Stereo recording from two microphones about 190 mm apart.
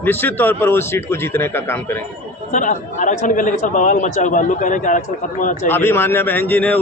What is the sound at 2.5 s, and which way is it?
A man's voice, 40° left (ahead or behind).